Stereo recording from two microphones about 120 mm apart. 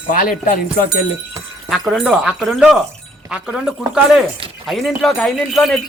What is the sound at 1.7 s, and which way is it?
Speech, centre (ahead or behind).